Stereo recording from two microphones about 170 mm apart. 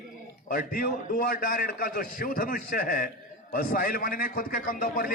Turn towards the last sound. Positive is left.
turn(degrees=55)  # may be behind; listen again after turning